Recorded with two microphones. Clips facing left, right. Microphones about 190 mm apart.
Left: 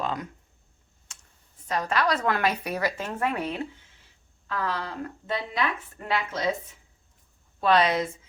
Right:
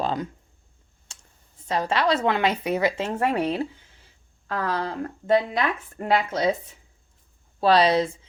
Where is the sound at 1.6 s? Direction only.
30° right (ahead or behind).